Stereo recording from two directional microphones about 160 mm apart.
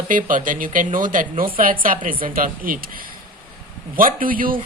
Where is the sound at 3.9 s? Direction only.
60° right (ahead or behind).